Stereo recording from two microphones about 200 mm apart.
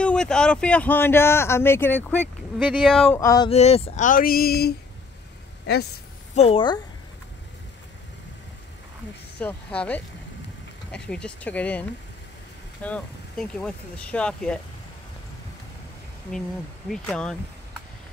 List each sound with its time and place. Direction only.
0.0 s speech: 5° left (ahead or behind)
3.2 s speech: 15° left (ahead or behind)
3.4 s a sound: 30° left (ahead or behind); by 4.7 s 50° left (ahead or behind)
6.3 s a woman's voice: 30° left (ahead or behind)
9.4 s speech: 5° left (ahead or behind)
12.8 s speech: 5° left (ahead or behind)
16.9 s speech: 5° left (ahead or behind)